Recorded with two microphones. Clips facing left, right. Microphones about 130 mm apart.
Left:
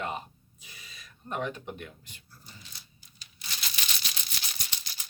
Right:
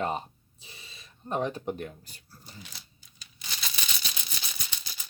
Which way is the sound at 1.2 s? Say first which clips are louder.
Right 4 dB; 35° right (ahead or behind).